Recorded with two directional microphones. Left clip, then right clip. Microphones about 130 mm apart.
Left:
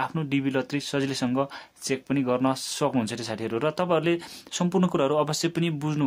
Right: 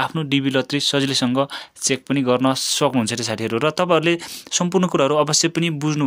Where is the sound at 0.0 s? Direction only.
40° right (ahead or behind).